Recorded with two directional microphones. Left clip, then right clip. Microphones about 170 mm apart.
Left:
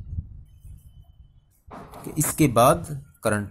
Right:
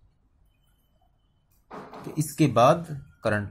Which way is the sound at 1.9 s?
20° left (ahead or behind).